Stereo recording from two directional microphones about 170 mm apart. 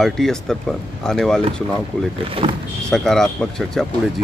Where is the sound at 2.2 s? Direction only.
30° right (ahead or behind).